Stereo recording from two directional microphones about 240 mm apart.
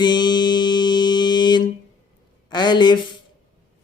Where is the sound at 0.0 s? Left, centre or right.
Centre.